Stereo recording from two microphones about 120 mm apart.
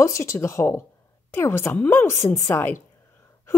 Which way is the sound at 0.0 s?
25° left (ahead or behind).